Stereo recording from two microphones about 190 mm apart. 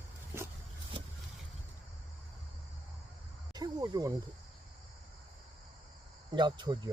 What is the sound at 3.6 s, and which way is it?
Cricket, 20° right (ahead or behind).